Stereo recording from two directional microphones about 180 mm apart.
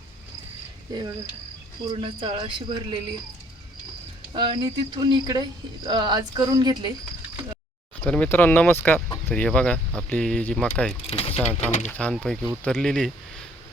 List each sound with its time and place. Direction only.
0.9 s speech: 20° right (ahead or behind)
4.4 s speech: 25° right (ahead or behind)
8.0 s speech: 10° left (ahead or behind)
11.0 s speech: 30° left (ahead or behind)
11.9 s speech: 5° left (ahead or behind)